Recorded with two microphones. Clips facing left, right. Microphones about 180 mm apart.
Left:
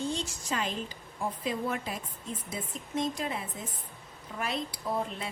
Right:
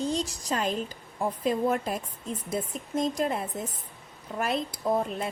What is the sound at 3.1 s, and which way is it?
A woman's voice, 50° right (ahead or behind).